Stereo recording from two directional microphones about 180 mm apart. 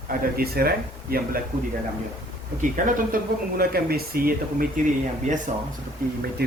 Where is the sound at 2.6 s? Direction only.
45° right (ahead or behind).